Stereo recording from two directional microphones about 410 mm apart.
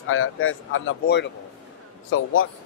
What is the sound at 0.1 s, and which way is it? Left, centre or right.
Speech, left.